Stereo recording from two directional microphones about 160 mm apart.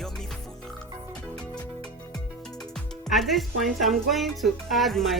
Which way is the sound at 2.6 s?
5° left (ahead or behind).